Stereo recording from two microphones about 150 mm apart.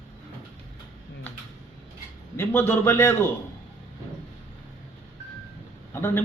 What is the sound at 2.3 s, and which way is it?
Speech, 15° left (ahead or behind).